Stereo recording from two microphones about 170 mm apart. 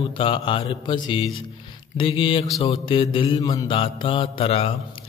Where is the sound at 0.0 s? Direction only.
30° left (ahead or behind).